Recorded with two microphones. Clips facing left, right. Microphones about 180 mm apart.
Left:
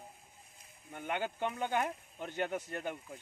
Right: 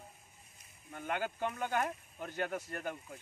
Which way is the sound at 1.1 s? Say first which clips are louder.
Left 1 dB; 5° right (ahead or behind).